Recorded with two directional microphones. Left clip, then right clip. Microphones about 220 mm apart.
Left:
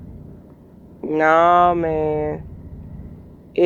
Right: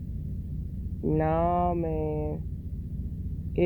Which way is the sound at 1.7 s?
60° left (ahead or behind).